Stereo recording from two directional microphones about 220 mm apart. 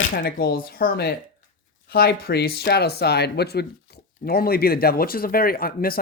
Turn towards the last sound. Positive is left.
turn(degrees=40)  # may be behind; listen again after turning